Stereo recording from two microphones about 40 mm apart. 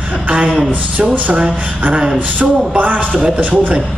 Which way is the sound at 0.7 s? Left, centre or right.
Right.